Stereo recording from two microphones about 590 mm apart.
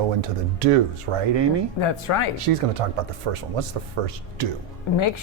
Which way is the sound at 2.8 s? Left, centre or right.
Right.